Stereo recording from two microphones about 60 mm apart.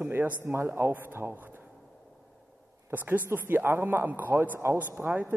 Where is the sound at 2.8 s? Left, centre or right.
Right.